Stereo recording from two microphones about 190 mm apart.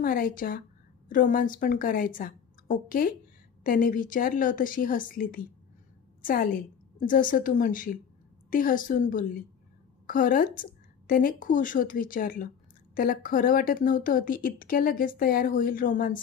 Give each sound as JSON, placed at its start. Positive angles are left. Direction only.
{"t": 0.0, "sound": "a woman's voice", "side_deg": 45}